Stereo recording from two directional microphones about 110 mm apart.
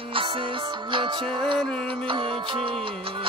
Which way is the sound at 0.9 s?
50° right (ahead or behind).